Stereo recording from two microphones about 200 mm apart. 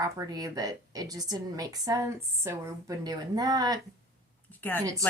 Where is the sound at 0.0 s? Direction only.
20° right (ahead or behind).